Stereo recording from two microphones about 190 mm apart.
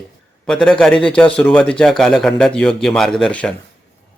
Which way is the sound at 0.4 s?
5° left (ahead or behind).